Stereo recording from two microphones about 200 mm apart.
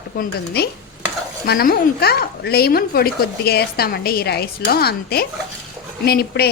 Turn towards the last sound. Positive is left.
turn(degrees=50)  # may be behind; listen again after turning